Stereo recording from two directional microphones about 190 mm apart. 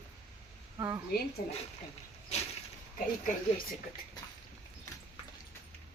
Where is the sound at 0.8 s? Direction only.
15° right (ahead or behind).